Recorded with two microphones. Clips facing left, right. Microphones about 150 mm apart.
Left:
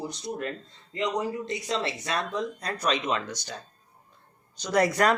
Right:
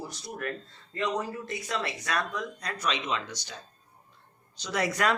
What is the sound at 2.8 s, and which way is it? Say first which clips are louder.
Speech: left 4 dB; 45° left (ahead or behind).